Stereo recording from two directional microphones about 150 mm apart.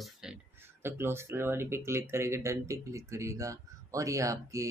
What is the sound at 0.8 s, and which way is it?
Speech, 15° right (ahead or behind).